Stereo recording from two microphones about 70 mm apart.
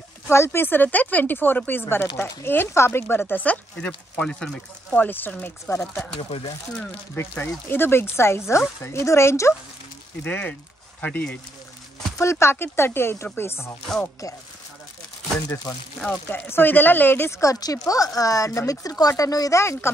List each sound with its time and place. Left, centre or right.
0.3 s speech: left; by 5.0 s centre
5.0 s speech: left
5.7 s speech: left
7.2 s speech: left
10.2 s speech: left
12.2 s speech: left
16.3 s speech: left
17.4 s speech: left
19.6 s speech: left